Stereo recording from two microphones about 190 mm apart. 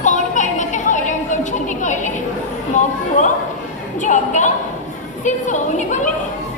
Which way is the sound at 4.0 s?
40° left (ahead or behind).